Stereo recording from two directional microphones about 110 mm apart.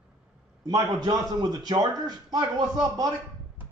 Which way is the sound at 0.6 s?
40° right (ahead or behind).